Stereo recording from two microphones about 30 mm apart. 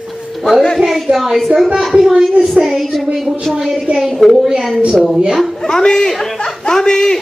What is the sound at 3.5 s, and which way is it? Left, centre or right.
Speech, centre.